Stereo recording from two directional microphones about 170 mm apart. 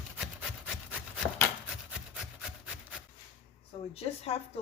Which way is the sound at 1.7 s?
5° right (ahead or behind).